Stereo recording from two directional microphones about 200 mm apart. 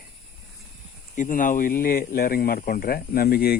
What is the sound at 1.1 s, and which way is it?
Speech, 40° left (ahead or behind).